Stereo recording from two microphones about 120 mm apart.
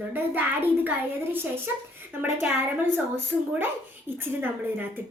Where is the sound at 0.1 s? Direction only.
15° right (ahead or behind).